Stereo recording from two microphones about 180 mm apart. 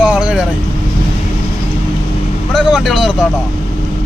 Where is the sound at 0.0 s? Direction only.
5° right (ahead or behind).